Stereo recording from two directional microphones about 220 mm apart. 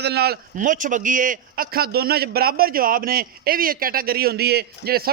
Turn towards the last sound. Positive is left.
turn(degrees=-45)  # may be behind; listen again after turning